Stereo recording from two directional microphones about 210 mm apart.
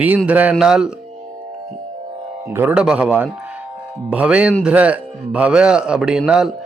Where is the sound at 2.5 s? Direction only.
10° right (ahead or behind).